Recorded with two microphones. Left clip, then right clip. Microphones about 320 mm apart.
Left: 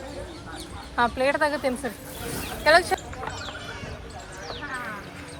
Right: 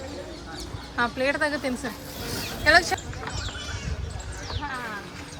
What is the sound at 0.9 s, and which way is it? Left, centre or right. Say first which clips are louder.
Speech: left 2 dB; centre.